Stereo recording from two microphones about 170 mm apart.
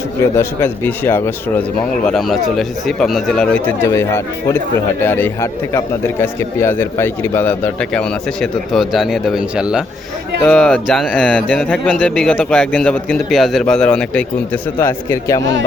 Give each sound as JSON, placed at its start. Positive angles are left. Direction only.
{"t": 0.3, "sound": "speech", "side_deg": 15}
{"t": 2.0, "sound": "speech", "side_deg": 0}